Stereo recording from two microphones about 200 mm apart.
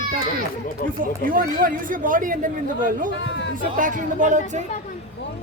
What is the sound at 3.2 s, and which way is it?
Speech, 65° left (ahead or behind).